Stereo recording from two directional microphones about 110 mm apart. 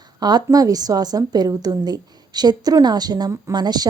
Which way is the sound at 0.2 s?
40° right (ahead or behind).